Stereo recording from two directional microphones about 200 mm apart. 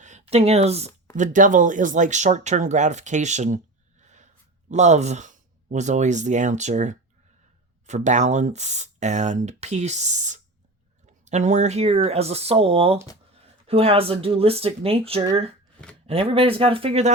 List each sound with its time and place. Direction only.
0.0 s speech: 35° right (ahead or behind)
4.7 s speech: 35° right (ahead or behind)